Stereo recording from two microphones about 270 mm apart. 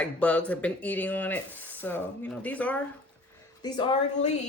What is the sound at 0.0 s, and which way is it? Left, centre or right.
Speech, centre.